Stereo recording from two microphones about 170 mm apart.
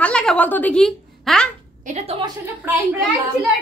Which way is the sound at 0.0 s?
5° left (ahead or behind).